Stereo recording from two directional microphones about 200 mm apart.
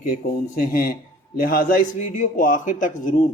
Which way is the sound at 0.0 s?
45° left (ahead or behind).